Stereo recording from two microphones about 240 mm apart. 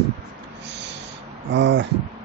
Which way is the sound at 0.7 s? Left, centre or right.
Right.